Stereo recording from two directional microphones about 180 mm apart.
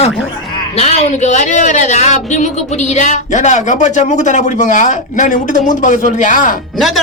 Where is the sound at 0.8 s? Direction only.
40° left (ahead or behind).